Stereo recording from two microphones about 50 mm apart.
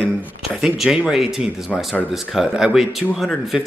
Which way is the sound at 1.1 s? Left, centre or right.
Centre.